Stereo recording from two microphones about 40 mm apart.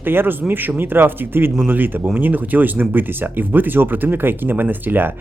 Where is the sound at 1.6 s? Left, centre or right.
Right.